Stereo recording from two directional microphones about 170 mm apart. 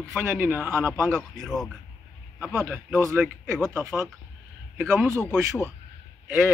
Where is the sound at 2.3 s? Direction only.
10° right (ahead or behind).